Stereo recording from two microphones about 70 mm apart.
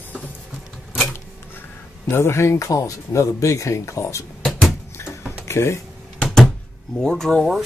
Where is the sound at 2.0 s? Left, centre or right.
Left.